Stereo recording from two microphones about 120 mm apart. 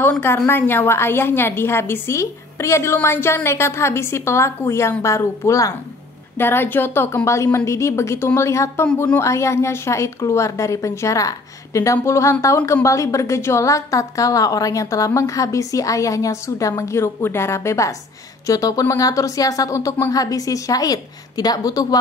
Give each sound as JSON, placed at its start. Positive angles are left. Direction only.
{"t": 0.5, "sound": "a woman's voice", "side_deg": 20}
{"t": 8.9, "sound": "speech", "side_deg": 10}
{"t": 9.2, "sound": "a woman's voice", "side_deg": 25}